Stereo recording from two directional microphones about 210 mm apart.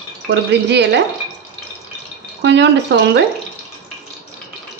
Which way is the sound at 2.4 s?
55° right (ahead or behind).